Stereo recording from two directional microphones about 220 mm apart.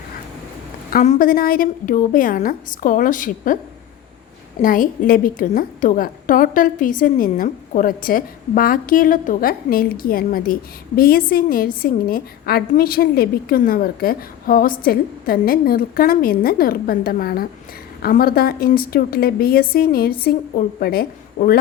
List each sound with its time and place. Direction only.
0.9 s a woman's voice: 40° left (ahead or behind)
4.6 s a woman's voice: 40° left (ahead or behind)